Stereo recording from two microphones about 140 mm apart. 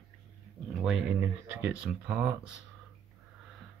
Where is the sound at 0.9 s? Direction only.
5° right (ahead or behind).